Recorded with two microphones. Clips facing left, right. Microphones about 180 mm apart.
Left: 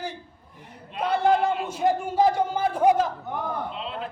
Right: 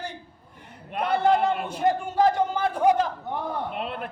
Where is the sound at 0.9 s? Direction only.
60° right (ahead or behind).